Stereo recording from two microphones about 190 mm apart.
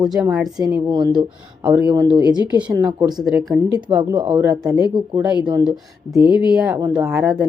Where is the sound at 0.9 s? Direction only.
25° right (ahead or behind).